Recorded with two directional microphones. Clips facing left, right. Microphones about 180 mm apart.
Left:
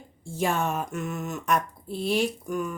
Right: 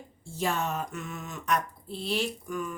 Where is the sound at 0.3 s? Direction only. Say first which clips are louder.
Left 4 dB; 50° left (ahead or behind).